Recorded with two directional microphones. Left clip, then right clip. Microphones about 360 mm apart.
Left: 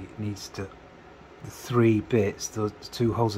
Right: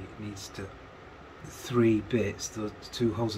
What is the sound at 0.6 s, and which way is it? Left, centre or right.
Speech, centre.